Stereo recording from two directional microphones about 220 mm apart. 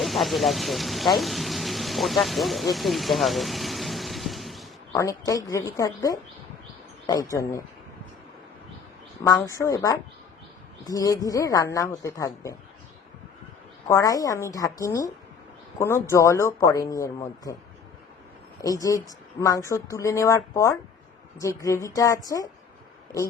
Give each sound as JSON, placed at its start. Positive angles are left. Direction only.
{"t": 0.0, "sound": "a sound", "side_deg": 0}
{"t": 4.9, "sound": "speech", "side_deg": 15}
{"t": 9.2, "sound": "speech", "side_deg": 15}
{"t": 13.8, "sound": "speech", "side_deg": 15}
{"t": 18.6, "sound": "speech", "side_deg": 15}